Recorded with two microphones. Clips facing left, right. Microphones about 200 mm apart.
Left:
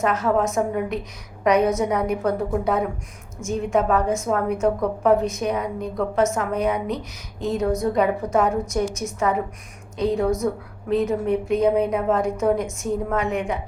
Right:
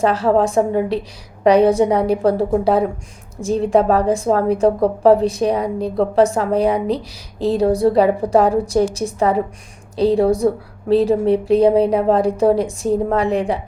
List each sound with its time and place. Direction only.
0.0 s a woman's voice: 30° right (ahead or behind)